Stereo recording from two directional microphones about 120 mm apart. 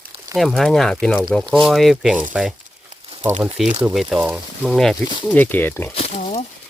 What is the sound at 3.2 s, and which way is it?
Speech, 15° right (ahead or behind).